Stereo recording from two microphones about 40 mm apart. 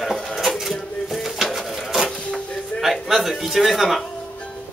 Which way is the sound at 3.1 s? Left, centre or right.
Centre.